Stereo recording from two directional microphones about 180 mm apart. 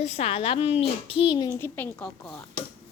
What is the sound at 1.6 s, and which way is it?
Speech, 10° left (ahead or behind).